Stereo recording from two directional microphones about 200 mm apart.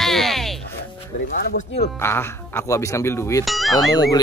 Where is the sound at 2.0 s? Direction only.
10° left (ahead or behind).